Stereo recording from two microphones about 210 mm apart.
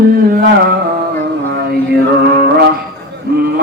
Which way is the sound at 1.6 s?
50° right (ahead or behind).